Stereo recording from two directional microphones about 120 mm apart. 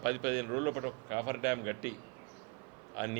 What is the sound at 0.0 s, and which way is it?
A man's voice, 20° right (ahead or behind).